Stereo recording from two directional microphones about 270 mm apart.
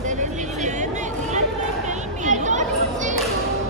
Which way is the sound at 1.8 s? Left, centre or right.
Right.